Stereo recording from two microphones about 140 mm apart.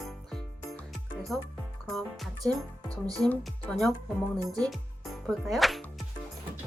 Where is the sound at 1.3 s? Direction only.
Centre (ahead or behind).